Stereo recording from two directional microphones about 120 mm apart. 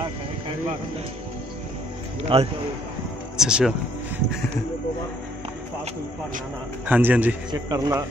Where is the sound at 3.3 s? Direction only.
5° right (ahead or behind).